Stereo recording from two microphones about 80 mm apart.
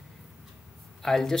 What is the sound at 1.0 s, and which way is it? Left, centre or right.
Speech, centre.